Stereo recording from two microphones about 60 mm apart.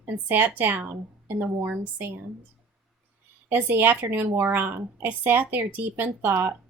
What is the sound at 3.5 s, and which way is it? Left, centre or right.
Speech, right.